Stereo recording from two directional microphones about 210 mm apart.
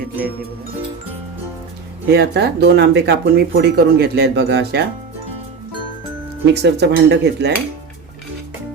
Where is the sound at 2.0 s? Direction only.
50° right (ahead or behind).